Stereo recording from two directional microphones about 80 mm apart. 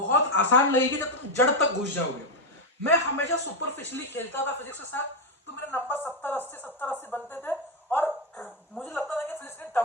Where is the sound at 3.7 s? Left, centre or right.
Left.